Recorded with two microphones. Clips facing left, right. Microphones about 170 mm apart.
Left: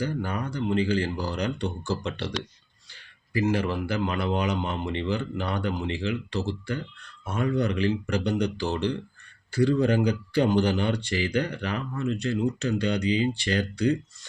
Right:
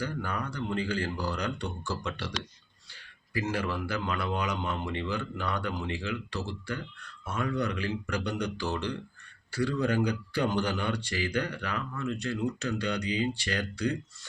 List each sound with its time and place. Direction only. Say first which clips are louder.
0.0 s speech: left 4 dB; 20° left (ahead or behind)
3.5 s speech: left 5 dB; 20° left (ahead or behind)